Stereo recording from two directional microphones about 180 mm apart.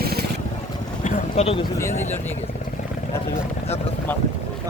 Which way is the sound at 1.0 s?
35° left (ahead or behind).